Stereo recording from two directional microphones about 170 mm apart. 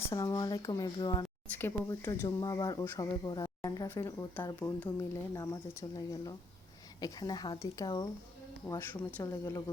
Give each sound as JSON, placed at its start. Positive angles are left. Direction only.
{"t": 0.0, "sound": "speech", "side_deg": 20}